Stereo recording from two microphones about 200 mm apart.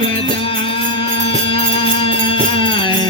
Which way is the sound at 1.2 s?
25° left (ahead or behind).